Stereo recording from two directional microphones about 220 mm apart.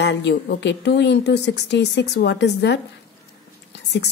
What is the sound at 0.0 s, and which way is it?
A woman's voice, 50° left (ahead or behind).